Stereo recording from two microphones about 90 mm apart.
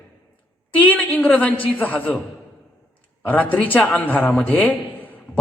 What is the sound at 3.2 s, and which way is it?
A man's voice, 15° left (ahead or behind).